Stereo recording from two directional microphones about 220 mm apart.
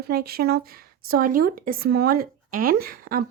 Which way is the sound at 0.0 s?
45° right (ahead or behind).